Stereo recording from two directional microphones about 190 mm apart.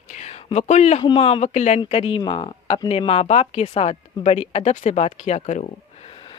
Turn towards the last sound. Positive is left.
turn(degrees=25)  # may be behind; listen again after turning